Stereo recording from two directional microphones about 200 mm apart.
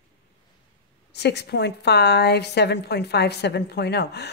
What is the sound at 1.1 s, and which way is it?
A woman's voice, 55° left (ahead or behind).